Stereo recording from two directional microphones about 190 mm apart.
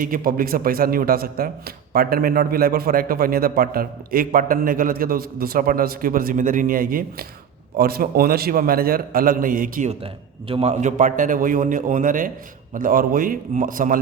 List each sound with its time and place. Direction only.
0.0 s a man's voice: 45° right (ahead or behind)